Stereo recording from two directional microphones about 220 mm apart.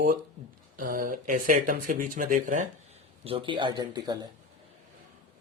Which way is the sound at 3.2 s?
25° right (ahead or behind).